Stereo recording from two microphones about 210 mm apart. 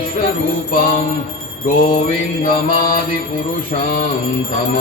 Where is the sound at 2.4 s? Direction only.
40° left (ahead or behind).